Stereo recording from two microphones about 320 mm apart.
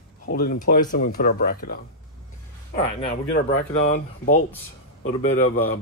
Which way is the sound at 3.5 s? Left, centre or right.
Left.